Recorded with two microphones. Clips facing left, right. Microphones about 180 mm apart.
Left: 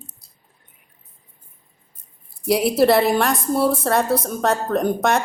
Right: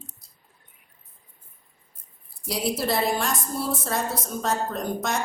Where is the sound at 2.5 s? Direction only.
65° left (ahead or behind).